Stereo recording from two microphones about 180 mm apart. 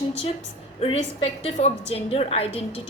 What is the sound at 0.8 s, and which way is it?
A woman's voice, 35° left (ahead or behind).